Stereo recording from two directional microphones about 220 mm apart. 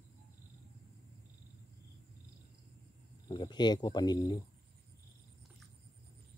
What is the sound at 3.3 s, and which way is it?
Speech, 20° left (ahead or behind).